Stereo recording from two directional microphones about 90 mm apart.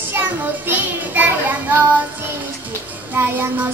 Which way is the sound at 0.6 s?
20° right (ahead or behind).